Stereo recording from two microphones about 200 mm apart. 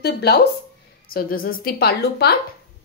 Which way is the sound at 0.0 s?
55° left (ahead or behind).